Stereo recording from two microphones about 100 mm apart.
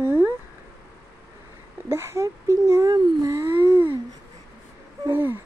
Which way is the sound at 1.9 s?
25° right (ahead or behind).